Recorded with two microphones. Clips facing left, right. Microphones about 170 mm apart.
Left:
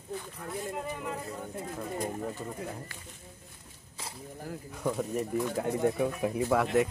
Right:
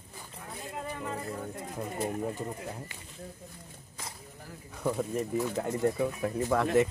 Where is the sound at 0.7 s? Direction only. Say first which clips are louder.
Left 1 dB; 5° left (ahead or behind).